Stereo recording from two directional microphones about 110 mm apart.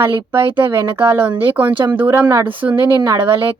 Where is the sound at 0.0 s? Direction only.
25° right (ahead or behind).